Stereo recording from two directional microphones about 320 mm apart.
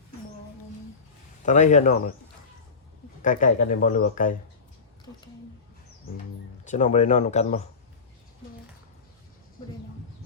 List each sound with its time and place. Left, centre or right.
1.5 s speech: left
3.2 s speech: left
6.7 s speech: left